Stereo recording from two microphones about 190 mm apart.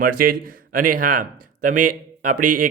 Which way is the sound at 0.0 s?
50° right (ahead or behind).